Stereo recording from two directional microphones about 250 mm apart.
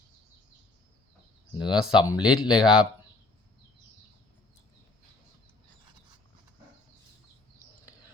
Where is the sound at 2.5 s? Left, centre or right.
Centre.